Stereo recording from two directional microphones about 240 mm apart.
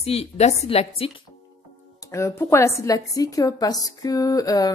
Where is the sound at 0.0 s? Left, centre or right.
Left.